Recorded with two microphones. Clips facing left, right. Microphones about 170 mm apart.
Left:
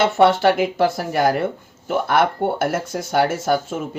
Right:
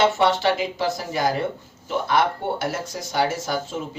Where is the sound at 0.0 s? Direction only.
55° left (ahead or behind).